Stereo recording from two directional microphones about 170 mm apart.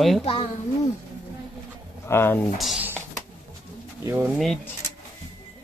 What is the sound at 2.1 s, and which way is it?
Speech, 15° left (ahead or behind).